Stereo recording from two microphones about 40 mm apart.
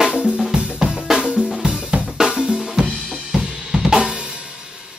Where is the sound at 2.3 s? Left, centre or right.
Centre.